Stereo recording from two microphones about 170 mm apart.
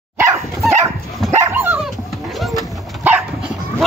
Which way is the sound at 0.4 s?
Centre (ahead or behind).